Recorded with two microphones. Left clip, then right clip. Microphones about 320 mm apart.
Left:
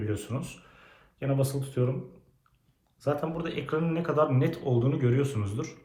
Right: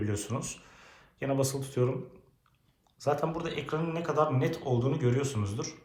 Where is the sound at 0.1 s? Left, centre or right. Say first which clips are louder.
Left 1 dB; centre.